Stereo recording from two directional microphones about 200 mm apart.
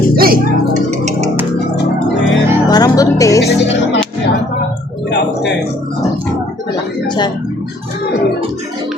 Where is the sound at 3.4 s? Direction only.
60° left (ahead or behind).